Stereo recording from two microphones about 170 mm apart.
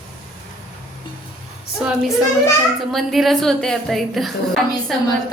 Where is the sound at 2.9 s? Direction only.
Centre (ahead or behind).